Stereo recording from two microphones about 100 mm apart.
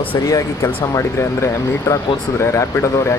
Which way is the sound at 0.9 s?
30° left (ahead or behind).